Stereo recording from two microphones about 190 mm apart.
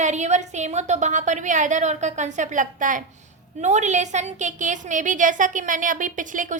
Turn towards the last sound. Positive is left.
turn(degrees=-45)  # may be behind; listen again after turning